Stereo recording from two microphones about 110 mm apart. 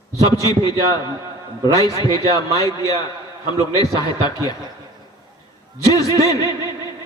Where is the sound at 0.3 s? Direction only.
35° left (ahead or behind).